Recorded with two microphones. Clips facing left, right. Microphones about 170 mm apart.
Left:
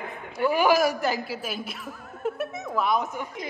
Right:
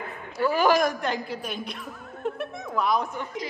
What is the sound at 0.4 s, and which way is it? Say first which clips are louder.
A woman's voice: even; 15° left (ahead or behind).